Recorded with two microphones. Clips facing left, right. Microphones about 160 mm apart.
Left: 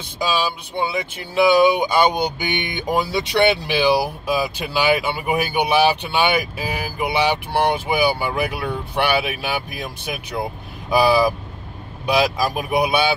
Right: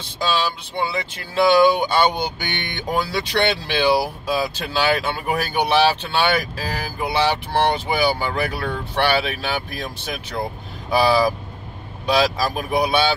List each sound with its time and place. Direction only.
0.2 s speech: 10° left (ahead or behind)